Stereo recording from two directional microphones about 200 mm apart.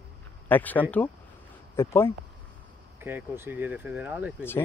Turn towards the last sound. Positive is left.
turn(degrees=-10)  # may be behind; listen again after turning